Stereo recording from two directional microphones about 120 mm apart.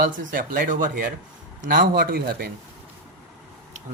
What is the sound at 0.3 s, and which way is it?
Speech, 90° right.